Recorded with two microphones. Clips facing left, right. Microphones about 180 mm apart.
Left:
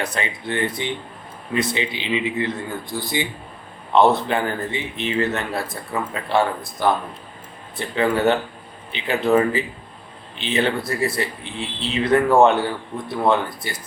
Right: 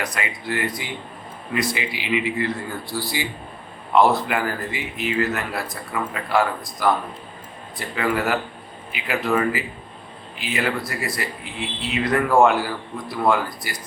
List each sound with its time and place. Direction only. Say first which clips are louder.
0.0 s speech: left 2 dB; 30° left (ahead or behind)